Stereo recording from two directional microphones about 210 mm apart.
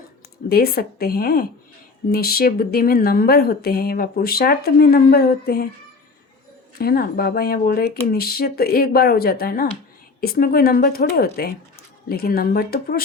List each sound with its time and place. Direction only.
0.4 s speech: 50° left (ahead or behind)
6.7 s speech: 45° left (ahead or behind)